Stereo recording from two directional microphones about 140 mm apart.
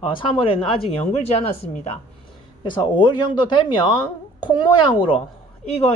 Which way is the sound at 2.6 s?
35° left (ahead or behind).